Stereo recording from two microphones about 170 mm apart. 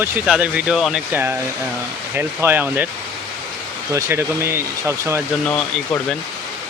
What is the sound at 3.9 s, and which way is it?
Speech, 15° right (ahead or behind).